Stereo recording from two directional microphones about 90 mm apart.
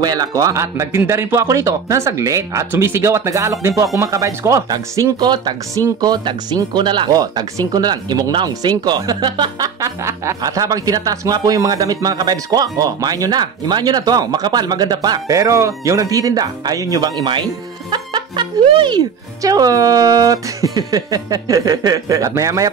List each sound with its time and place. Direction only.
0.0 s speech: 45° right (ahead or behind)
9.8 s speech: 35° right (ahead or behind)
17.2 s speech: 60° right (ahead or behind)
19.4 s speech: 40° right (ahead or behind)